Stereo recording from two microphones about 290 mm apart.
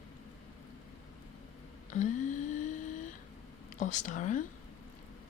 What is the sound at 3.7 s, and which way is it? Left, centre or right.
Speech, left.